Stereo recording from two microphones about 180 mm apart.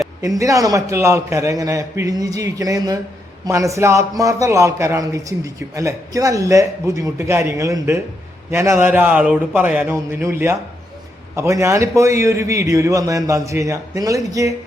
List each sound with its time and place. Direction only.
0.2 s a man's voice: 20° right (ahead or behind)